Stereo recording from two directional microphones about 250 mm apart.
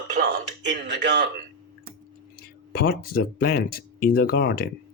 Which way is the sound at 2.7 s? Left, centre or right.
Left.